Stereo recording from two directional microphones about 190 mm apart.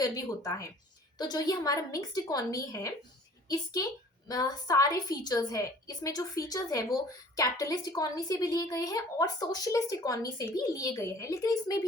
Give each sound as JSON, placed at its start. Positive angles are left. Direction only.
{"t": 0.0, "sound": "a woman's voice", "side_deg": 20}